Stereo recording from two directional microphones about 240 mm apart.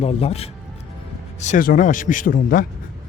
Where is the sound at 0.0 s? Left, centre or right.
Left.